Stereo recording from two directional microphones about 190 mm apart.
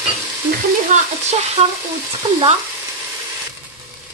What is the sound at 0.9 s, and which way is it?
Speech, 40° right (ahead or behind).